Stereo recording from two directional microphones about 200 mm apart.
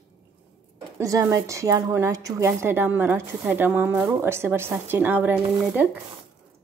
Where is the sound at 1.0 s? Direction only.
15° right (ahead or behind).